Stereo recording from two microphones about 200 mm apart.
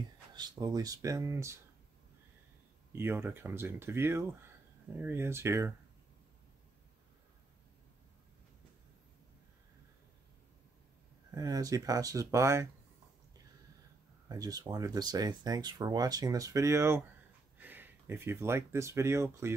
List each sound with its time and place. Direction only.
0.3 s speech: 20° right (ahead or behind)
2.9 s speech: 10° right (ahead or behind)
11.3 s speech: 15° right (ahead or behind)
14.3 s speech: 20° right (ahead or behind)